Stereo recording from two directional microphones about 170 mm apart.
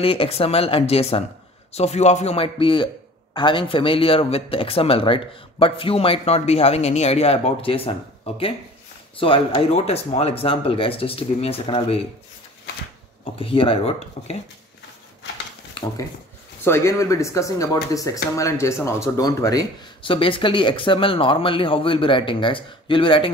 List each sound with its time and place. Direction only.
0.0 s speech: 35° left (ahead or behind)
13.2 s speech: 30° left (ahead or behind)
15.8 s speech: 30° left (ahead or behind)
16.6 s speech: 15° left (ahead or behind); by 23.3 s 30° left (ahead or behind)